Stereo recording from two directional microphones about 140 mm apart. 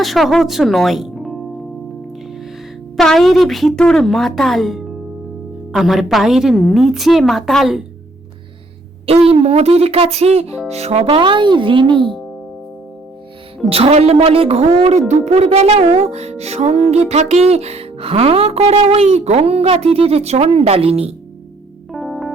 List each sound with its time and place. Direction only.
0.0 s speech: centre (ahead or behind)
3.0 s a woman's voice: centre (ahead or behind)
9.0 s speech: 45° right (ahead or behind)
11.2 s a child's voice: 35° right (ahead or behind)
13.7 s speech: 45° right (ahead or behind)
21.9 s synthesizer: centre (ahead or behind)